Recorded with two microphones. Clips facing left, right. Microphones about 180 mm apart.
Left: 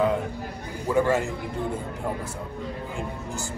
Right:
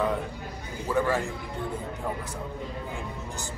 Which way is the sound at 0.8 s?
15° left (ahead or behind).